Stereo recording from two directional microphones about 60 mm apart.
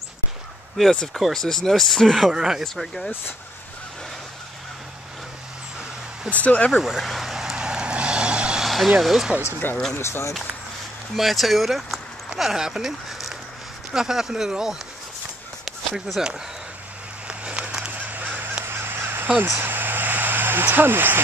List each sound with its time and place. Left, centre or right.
0.9 s speech: centre
2.3 s speech: centre
2.6 s speech: centre
6.3 s speech: left
6.8 s vehicle: centre
8.6 s speech: centre
9.6 s speech: left
11.1 s speech: centre
15.6 s a sound: centre
17.3 s a sound: centre
17.9 s goose: right
18.7 s goose: right
19.6 s vehicle: right